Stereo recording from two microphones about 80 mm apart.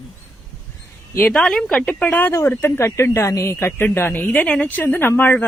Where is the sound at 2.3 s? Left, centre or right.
Left.